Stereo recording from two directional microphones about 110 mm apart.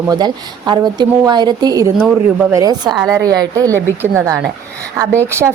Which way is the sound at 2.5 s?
35° right (ahead or behind).